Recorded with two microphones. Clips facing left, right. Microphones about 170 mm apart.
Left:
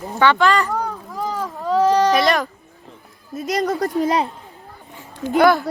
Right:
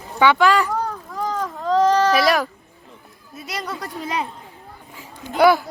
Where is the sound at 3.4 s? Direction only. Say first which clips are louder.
Left 10 dB; 40° left (ahead or behind).